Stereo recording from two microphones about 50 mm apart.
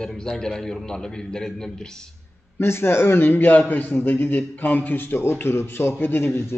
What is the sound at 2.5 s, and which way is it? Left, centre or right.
A man's voice, left.